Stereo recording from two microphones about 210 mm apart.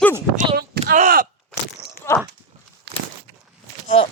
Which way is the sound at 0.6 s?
50° right (ahead or behind).